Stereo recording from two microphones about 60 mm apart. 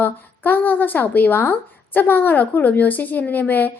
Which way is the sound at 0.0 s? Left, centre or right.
Left.